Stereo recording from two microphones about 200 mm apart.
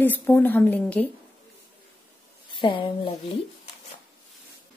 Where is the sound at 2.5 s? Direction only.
25° left (ahead or behind).